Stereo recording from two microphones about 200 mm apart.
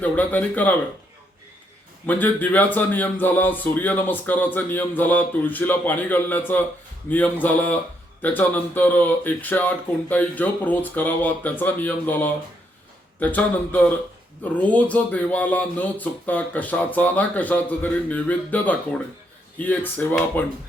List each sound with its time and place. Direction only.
0.0 s speech: 10° left (ahead or behind)
2.0 s speech: 10° left (ahead or behind)